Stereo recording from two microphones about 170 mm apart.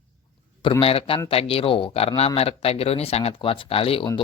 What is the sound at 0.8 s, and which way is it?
Speech, 35° left (ahead or behind).